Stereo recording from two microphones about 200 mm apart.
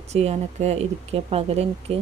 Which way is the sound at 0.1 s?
35° right (ahead or behind).